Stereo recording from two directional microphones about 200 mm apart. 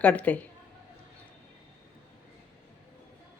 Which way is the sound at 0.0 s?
10° left (ahead or behind).